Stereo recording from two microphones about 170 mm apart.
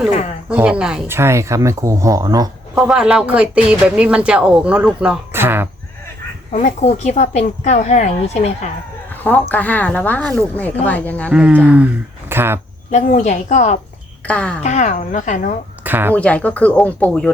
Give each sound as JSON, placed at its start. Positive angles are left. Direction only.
{"t": 0.5, "sound": "speech", "side_deg": -5}
{"t": 2.7, "sound": "speech", "side_deg": -5}
{"t": 6.5, "sound": "speech", "side_deg": 45}
{"t": 9.2, "sound": "a woman's voice", "side_deg": 10}
{"t": 11.3, "sound": "speech", "side_deg": -5}
{"t": 12.9, "sound": "speech", "side_deg": 45}
{"t": 14.3, "sound": "a woman's voice", "side_deg": 5}
{"t": 14.6, "sound": "speech", "side_deg": 40}
{"t": 15.8, "sound": "speech", "side_deg": -10}
{"t": 16.1, "sound": "a woman's voice", "side_deg": 10}